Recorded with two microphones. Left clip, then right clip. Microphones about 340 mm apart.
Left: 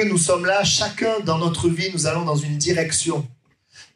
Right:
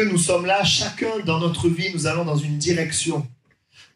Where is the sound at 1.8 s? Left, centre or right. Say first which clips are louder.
Left 1 dB; centre.